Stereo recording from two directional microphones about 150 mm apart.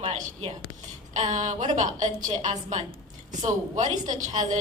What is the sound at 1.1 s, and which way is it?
A woman's voice, 55° right (ahead or behind).